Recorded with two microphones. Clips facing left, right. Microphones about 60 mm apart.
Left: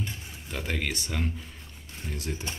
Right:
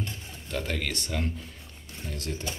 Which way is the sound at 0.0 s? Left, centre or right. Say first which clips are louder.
Even; centre.